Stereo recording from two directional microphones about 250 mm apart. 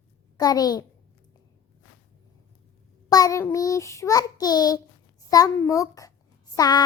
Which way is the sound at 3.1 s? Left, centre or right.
Centre.